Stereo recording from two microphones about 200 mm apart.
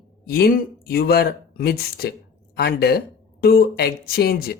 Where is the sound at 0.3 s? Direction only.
50° left (ahead or behind).